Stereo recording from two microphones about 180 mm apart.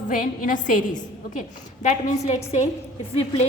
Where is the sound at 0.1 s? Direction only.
45° left (ahead or behind).